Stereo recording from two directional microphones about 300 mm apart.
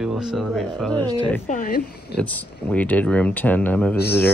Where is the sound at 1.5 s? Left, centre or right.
Left.